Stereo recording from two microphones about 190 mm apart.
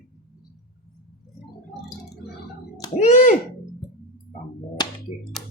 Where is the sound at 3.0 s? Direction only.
40° left (ahead or behind).